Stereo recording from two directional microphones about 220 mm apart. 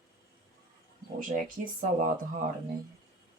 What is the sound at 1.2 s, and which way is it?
Speech, 35° right (ahead or behind).